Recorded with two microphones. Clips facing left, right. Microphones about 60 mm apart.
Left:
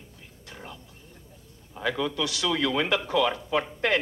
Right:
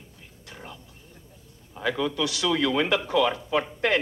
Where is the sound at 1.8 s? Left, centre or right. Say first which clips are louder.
Right 2 dB; right.